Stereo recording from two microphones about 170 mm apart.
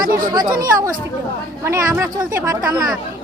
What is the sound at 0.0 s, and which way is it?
Speech, 55° right (ahead or behind).